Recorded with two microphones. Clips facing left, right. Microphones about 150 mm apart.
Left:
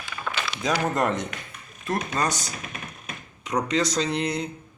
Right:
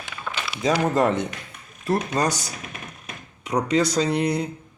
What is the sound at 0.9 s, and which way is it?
Speech, 30° right (ahead or behind).